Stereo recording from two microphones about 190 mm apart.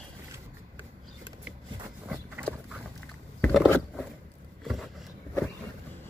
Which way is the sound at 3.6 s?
10° left (ahead or behind).